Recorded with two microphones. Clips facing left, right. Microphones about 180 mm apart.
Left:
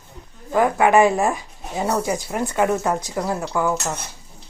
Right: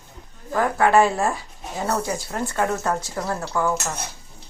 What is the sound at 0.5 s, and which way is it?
Speech, 15° left (ahead or behind).